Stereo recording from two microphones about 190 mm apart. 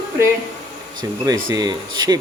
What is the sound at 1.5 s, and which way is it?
Speech, 20° right (ahead or behind).